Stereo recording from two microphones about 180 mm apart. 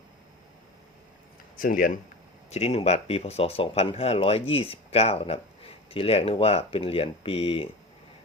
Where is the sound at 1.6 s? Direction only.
50° left (ahead or behind).